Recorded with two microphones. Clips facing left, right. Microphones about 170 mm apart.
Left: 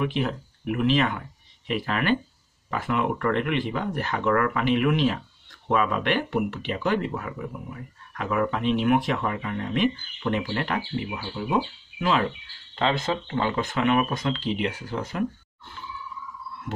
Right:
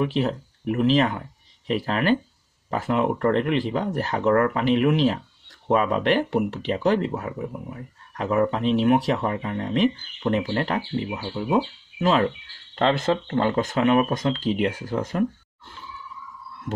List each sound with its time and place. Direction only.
0.0 s speech: 35° right (ahead or behind)
12.0 s speech: 40° right (ahead or behind)
12.7 s speech: 50° right (ahead or behind)